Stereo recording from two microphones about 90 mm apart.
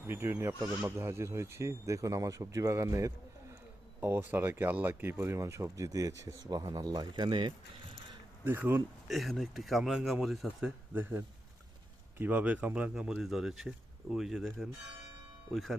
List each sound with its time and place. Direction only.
0.1 s speech: 25° right (ahead or behind)
4.0 s speech: 25° right (ahead or behind); by 7.5 s 60° right (ahead or behind)
8.4 s speech: 25° right (ahead or behind)
9.0 s speech: centre (ahead or behind)
10.9 s speech: 20° right (ahead or behind); by 14.7 s centre (ahead or behind)